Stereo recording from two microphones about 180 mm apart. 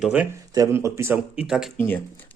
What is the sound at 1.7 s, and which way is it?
Speech, 10° left (ahead or behind).